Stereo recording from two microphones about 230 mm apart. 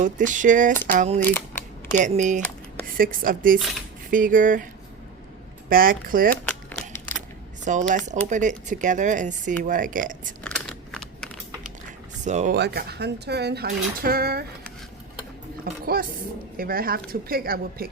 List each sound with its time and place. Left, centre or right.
0.0 s speech: right
1.2 s speech: centre
1.9 s speech: right
5.6 s speech: right
6.3 s crumpling: centre
7.6 s speech: right
10.4 s a sound: centre
12.2 s speech: right
12.5 s speech: right
15.6 s speech: right